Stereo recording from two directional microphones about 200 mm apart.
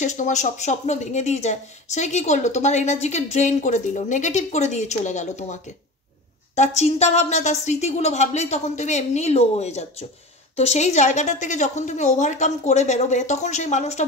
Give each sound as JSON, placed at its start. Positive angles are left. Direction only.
{"t": 0.0, "sound": "speech", "side_deg": 35}